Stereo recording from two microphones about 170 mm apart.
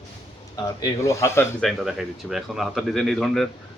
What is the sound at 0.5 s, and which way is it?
Speech, 25° left (ahead or behind).